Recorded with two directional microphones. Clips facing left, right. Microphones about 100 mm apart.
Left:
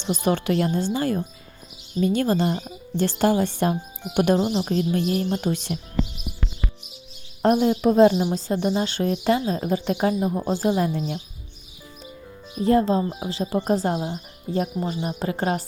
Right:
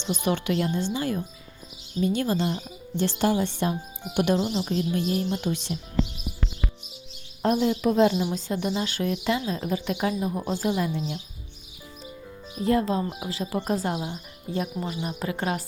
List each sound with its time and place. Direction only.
0.0 s speech: 35° left (ahead or behind)
7.5 s speech: 35° left (ahead or behind)
10.8 s speech: 40° left (ahead or behind)
12.6 s speech: 30° left (ahead or behind)